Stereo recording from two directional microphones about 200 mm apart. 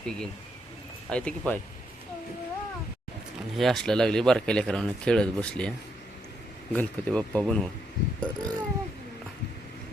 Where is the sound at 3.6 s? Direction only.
Centre (ahead or behind).